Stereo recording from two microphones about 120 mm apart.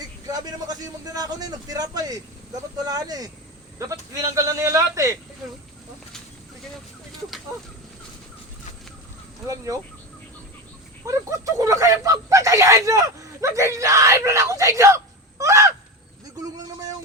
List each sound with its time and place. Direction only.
0.3 s a man's voice: 30° right (ahead or behind)
4.4 s speech: 25° right (ahead or behind)
11.0 s speech: 25° right (ahead or behind)